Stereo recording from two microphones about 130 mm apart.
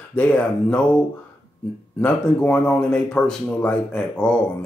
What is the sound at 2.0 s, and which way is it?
Speech, 10° left (ahead or behind).